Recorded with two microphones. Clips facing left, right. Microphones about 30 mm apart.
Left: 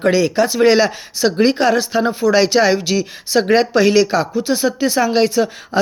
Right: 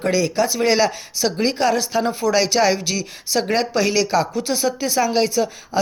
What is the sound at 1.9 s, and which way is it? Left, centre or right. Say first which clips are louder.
Speech: left 3 dB; centre.